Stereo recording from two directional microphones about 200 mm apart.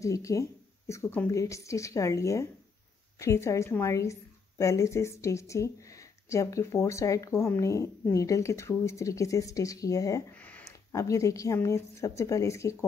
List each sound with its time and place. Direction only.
0.0 s a woman's voice: 15° left (ahead or behind)